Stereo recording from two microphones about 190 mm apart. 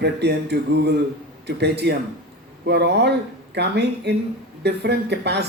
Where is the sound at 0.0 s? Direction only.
60° right (ahead or behind).